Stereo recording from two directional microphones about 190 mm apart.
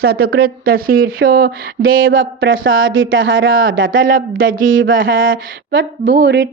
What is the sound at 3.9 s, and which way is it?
Speech, 50° right (ahead or behind).